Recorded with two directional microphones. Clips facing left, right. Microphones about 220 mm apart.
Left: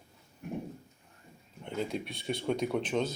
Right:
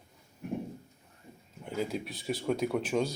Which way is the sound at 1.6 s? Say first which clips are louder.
Right 1 dB; 5° right (ahead or behind).